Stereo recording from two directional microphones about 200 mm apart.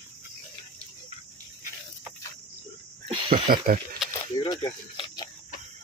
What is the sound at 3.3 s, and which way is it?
Speech, 45° right (ahead or behind).